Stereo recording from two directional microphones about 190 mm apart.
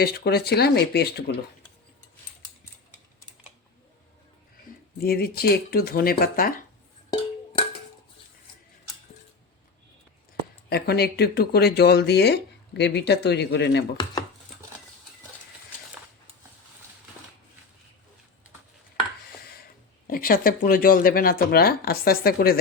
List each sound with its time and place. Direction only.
0.0 s speech: 55° left (ahead or behind)
4.9 s speech: 55° left (ahead or behind)
10.7 s speech: 55° left (ahead or behind)
13.9 s chopping: 25° left (ahead or behind)
20.1 s speech: 50° left (ahead or behind)